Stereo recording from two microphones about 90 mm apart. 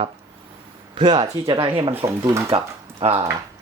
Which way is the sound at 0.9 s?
65° right (ahead or behind).